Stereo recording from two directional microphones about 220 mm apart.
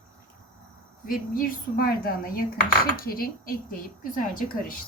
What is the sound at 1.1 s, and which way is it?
Speech, 40° left (ahead or behind).